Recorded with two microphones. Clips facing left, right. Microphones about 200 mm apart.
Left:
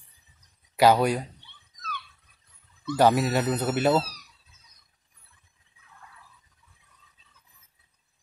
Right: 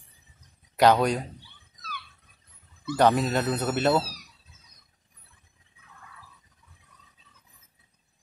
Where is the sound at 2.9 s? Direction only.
5° left (ahead or behind).